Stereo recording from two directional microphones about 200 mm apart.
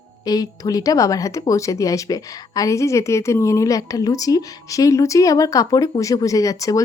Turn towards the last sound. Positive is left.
turn(degrees=15)  # may be behind; listen again after turning